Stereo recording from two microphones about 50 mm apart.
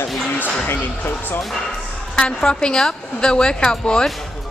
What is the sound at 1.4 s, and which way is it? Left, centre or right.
A woman's voice, centre.